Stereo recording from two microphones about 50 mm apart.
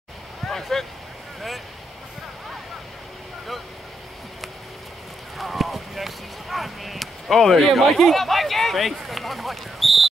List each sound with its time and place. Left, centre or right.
0.5 s vehicle: centre
5.4 s a sound: centre
8.0 s speech: centre